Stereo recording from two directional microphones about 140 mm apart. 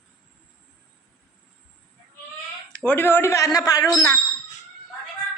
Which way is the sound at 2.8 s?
15° left (ahead or behind).